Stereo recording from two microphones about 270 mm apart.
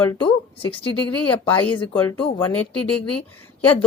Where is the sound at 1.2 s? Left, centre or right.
Centre.